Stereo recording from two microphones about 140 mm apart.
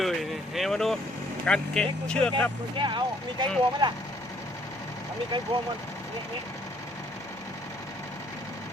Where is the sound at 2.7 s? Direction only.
35° right (ahead or behind).